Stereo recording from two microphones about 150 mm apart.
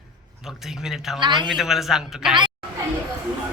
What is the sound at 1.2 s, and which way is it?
Speech, 30° right (ahead or behind).